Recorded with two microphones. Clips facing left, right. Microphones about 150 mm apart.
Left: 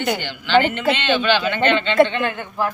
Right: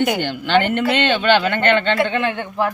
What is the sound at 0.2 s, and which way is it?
Speech, 50° right (ahead or behind).